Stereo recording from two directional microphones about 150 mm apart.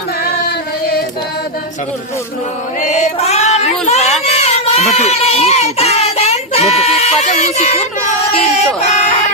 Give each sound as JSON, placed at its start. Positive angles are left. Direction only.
{"t": 0.2, "sound": "singing", "side_deg": 80}
{"t": 2.8, "sound": "child singing", "side_deg": 50}
{"t": 7.3, "sound": "speech", "side_deg": 45}
{"t": 8.8, "sound": "speech", "side_deg": 45}